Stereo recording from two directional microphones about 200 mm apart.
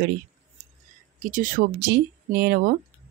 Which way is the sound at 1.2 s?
40° right (ahead or behind).